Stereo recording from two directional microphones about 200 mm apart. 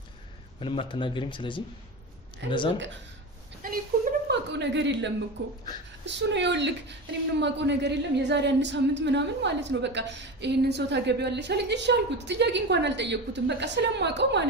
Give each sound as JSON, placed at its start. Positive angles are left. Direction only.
{"t": 0.6, "sound": "speech", "side_deg": 25}
{"t": 3.6, "sound": "speech", "side_deg": -45}
{"t": 4.3, "sound": "a woman's voice", "side_deg": -60}